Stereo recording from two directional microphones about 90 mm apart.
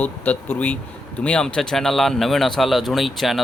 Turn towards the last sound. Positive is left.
turn(degrees=0)  # may be behind; listen again after turning